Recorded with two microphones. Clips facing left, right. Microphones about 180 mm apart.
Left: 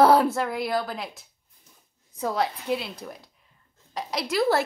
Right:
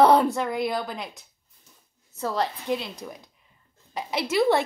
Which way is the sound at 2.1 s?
10° left (ahead or behind).